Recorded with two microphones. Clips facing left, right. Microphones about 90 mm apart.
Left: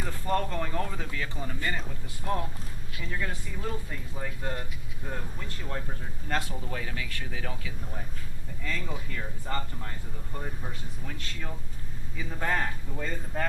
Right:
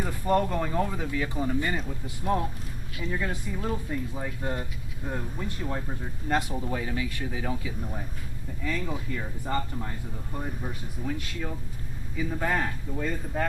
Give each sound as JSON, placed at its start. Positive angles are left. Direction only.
{"t": 0.0, "sound": "speech", "side_deg": -10}
{"t": 3.0, "sound": "speech", "side_deg": -15}